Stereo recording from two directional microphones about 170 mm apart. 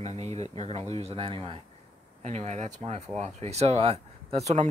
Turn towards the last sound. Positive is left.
turn(degrees=-40)  # may be behind; listen again after turning